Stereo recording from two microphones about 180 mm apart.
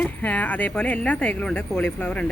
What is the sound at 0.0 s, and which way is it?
Speech, 10° left (ahead or behind).